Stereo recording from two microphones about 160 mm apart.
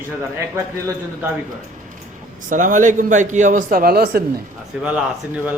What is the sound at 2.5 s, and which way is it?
A man's voice, 55° right (ahead or behind).